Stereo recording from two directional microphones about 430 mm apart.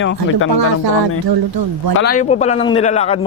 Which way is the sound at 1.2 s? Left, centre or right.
Right.